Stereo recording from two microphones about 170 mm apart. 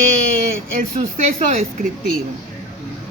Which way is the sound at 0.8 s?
50° right (ahead or behind).